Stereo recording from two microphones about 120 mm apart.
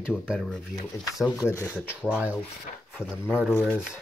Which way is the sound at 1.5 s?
20° left (ahead or behind).